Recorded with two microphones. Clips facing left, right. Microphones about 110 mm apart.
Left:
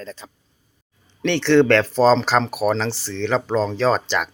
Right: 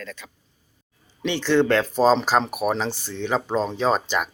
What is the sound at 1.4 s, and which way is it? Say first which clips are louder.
Speech: left 4 dB; 10° right (ahead or behind).